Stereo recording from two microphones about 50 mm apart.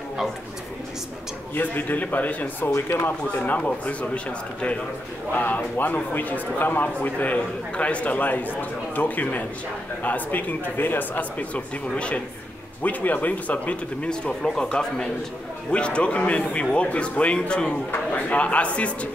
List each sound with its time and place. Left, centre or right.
1.5 s a man's voice: left
2.7 s speech: left
3.1 s a man's voice: left
5.3 s a man's voice: left
11.9 s a man's voice: left
12.8 s a man's voice: left
14.0 s a man's voice: centre